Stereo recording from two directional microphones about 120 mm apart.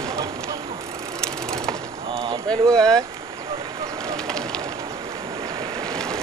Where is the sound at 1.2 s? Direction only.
5° left (ahead or behind).